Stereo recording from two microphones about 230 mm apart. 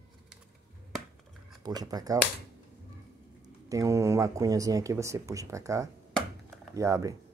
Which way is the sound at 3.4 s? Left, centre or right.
Centre.